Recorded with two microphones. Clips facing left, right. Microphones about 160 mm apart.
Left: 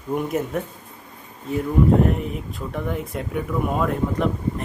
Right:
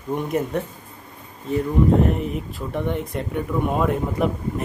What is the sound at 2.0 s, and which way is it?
Speech, centre (ahead or behind).